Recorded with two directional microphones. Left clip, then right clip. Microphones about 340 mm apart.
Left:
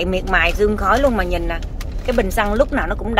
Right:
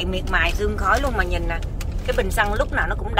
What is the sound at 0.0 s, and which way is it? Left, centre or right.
Speech, centre.